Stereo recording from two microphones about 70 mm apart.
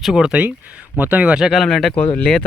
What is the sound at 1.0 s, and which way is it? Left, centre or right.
Speech, right.